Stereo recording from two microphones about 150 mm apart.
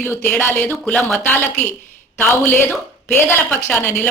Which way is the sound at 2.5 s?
15° left (ahead or behind).